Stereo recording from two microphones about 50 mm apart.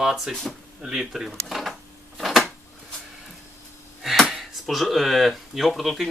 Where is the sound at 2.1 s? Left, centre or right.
Centre.